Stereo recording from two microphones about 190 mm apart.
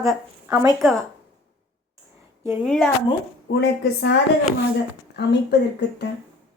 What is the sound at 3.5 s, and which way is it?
Speech, 60° left (ahead or behind).